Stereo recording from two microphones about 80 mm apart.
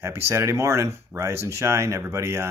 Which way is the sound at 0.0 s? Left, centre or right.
Right.